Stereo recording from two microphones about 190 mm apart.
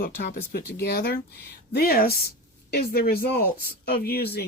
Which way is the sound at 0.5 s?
60° left (ahead or behind).